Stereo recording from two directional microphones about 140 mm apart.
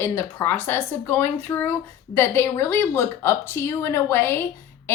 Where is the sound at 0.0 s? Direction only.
20° left (ahead or behind).